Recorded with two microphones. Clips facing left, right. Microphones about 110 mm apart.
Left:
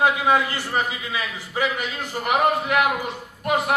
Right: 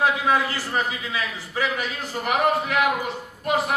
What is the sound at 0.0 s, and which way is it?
A man's voice, 15° left (ahead or behind).